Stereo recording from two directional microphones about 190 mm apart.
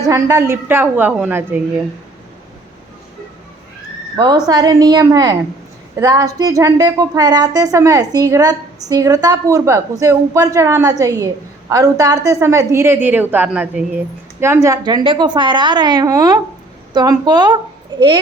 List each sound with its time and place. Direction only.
0.0 s a woman's voice: 15° right (ahead or behind)
4.2 s a woman's voice: 20° right (ahead or behind)